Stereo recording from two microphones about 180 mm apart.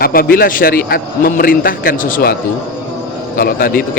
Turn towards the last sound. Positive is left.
turn(degrees=55)  # may be behind; listen again after turning